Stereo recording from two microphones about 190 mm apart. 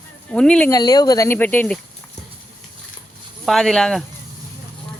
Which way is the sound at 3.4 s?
Centre (ahead or behind).